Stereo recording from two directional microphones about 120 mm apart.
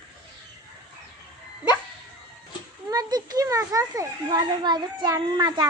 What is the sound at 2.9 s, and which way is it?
Speech, 35° right (ahead or behind).